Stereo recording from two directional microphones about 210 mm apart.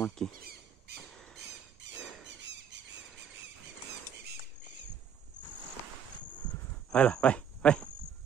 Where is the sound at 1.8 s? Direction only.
55° right (ahead or behind).